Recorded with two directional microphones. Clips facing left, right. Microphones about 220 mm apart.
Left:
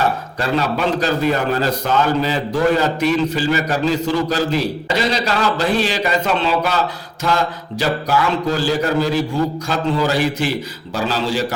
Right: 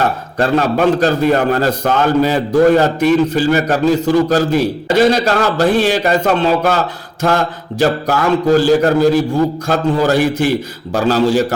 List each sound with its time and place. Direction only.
0.3 s a man's voice: 50° right (ahead or behind)